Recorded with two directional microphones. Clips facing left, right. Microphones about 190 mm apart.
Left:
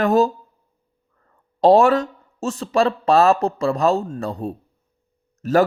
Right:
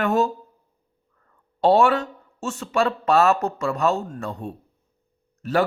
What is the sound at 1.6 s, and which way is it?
Speech, 40° left (ahead or behind).